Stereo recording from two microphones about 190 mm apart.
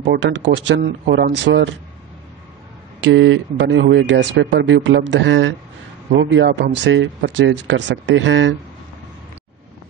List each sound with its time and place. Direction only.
0.0 s speech: 70° right (ahead or behind)
3.0 s speech: 80° right